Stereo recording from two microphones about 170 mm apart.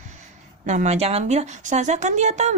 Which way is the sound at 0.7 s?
40° right (ahead or behind).